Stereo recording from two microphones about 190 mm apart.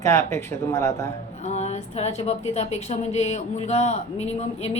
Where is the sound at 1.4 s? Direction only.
35° left (ahead or behind).